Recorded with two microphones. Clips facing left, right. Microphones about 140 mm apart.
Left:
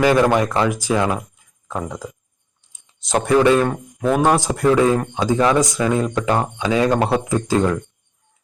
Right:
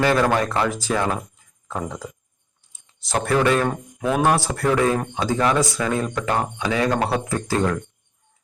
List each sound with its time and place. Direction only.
0.0 s speech: 15° left (ahead or behind)
2.7 s speech: 20° left (ahead or behind)
3.7 s speech: centre (ahead or behind)
4.2 s speech: 20° left (ahead or behind)